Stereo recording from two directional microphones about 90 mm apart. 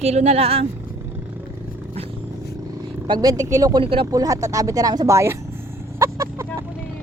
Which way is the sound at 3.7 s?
65° right (ahead or behind).